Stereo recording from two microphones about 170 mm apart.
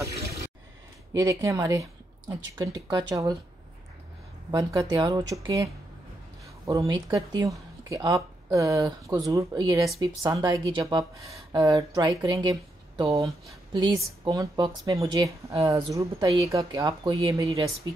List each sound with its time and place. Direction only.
1.1 s speech: 20° right (ahead or behind)
4.5 s speech: 20° right (ahead or behind)